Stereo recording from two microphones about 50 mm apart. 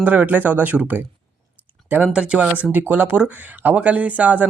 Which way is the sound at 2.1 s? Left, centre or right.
Right.